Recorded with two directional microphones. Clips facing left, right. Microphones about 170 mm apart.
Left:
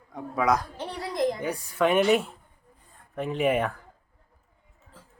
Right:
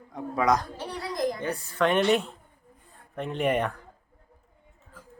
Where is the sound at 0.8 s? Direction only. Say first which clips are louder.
Left 2 dB; 25° left (ahead or behind).